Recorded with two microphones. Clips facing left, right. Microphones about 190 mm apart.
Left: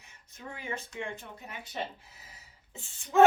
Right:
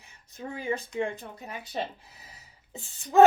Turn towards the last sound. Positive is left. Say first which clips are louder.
# right 4 dB
turn(degrees=-35)  # may be behind; listen again after turning